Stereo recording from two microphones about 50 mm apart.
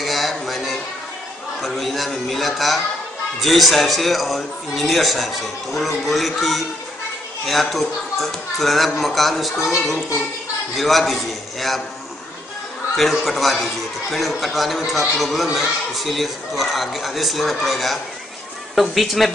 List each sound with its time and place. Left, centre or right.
0.0 s music: centre
1.6 s a man's voice: centre
12.9 s speech: centre